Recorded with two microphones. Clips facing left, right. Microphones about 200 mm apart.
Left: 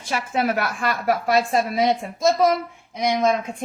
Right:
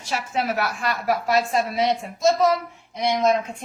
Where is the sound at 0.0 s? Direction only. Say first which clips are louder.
Left 3 dB; 55° left (ahead or behind).